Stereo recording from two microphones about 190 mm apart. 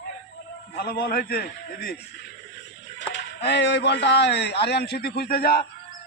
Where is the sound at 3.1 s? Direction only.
65° left (ahead or behind).